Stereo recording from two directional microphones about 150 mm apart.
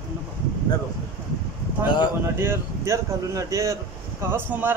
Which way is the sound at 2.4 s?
20° right (ahead or behind).